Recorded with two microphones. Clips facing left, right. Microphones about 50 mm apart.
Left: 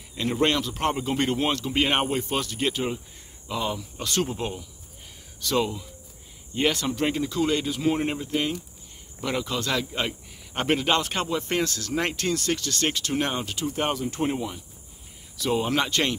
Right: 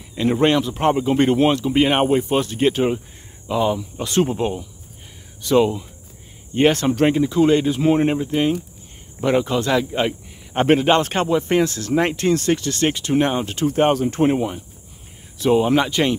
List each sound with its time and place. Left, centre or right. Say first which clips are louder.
0.1 s speech: right 7 dB; right
1.2 s speech: right 9 dB; right
1.5 s speech: right 7 dB; centre
2.4 s speech: right 9 dB; right
3.4 s speech: right 9 dB; centre
6.5 s speech: right 8 dB; right
7.2 s speech: right 9 dB; right
11.2 s speech: right 8 dB; right
13.6 s speech: right 12 dB; right
15.5 s speech: right 7 dB; centre